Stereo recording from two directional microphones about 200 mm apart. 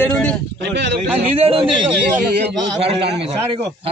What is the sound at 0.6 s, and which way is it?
Speech, 60° right (ahead or behind).